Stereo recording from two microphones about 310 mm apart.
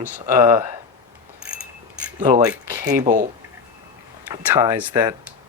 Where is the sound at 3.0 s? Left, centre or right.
Right.